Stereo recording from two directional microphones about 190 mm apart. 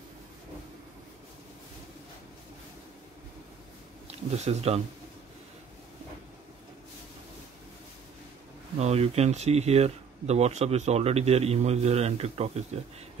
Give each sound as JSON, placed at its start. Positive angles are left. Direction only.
{"t": 4.1, "sound": "speech", "side_deg": -35}
{"t": 8.7, "sound": "speech", "side_deg": -35}